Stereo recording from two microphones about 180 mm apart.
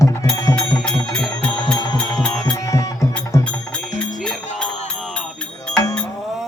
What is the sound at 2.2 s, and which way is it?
Music, 5° left (ahead or behind).